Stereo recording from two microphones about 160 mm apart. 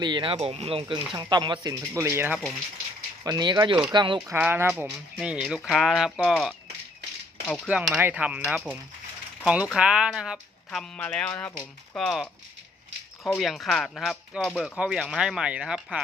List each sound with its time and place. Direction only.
0.0 s speech: 30° right (ahead or behind)
1.9 s speech: 15° right (ahead or behind)
3.2 s speech: 25° right (ahead or behind)
4.3 s speech: 10° right (ahead or behind); by 7.7 s 5° left (ahead or behind)
7.7 s speech: 5° right (ahead or behind)